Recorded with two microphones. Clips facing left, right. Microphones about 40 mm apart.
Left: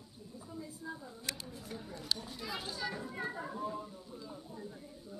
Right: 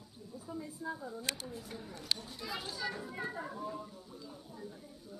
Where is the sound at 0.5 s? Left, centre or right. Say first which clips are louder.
Right 3 dB; centre.